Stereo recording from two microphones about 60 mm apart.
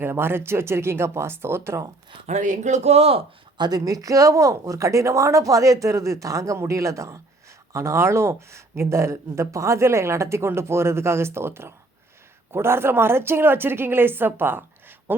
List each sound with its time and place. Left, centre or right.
0.0 s speech: right
3.7 s a woman's voice: right